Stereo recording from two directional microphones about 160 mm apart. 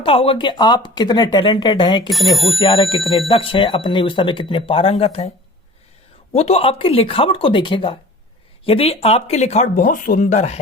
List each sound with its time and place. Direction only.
0.0 s speech: 35° left (ahead or behind)
2.0 s speech: centre (ahead or behind)
2.6 s speech: 30° left (ahead or behind)
6.3 s speech: 40° left (ahead or behind)